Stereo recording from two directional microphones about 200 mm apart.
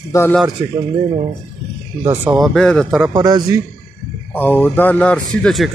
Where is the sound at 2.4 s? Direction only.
Centre (ahead or behind).